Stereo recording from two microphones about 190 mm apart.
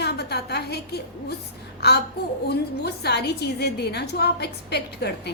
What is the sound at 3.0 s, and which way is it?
A woman's voice, 60° left (ahead or behind).